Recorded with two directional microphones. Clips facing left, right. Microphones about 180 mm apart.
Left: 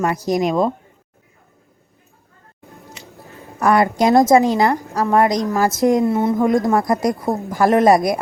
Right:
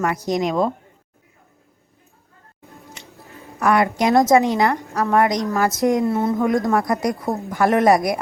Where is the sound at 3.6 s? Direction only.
35° left (ahead or behind).